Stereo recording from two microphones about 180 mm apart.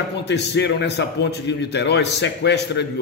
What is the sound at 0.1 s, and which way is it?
A man's voice, 70° left (ahead or behind).